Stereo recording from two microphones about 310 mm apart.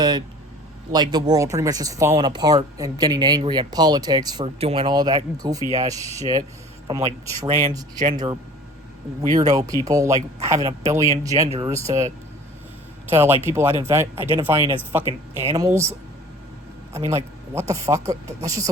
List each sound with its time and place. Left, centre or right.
0.0 s a man's voice: centre
13.1 s speech: centre